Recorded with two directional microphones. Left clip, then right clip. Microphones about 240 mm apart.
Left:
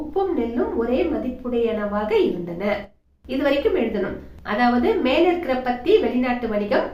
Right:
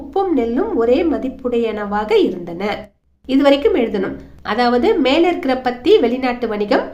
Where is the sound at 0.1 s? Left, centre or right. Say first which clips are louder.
Right 6 dB; right.